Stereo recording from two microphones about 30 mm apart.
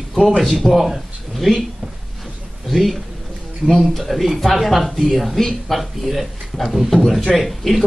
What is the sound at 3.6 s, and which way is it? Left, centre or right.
Speech, right.